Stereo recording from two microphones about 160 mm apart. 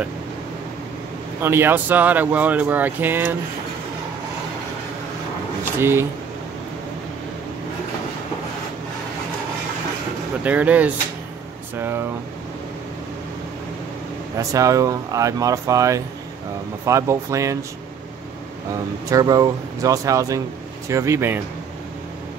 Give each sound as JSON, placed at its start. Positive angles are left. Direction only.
{"t": 1.4, "sound": "speech", "side_deg": -15}
{"t": 5.8, "sound": "speech", "side_deg": -15}
{"t": 10.4, "sound": "speech", "side_deg": -10}
{"t": 14.4, "sound": "speech", "side_deg": -20}
{"t": 19.0, "sound": "speech", "side_deg": -20}